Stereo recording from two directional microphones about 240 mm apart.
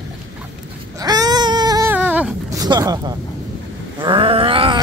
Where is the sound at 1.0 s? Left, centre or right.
Centre.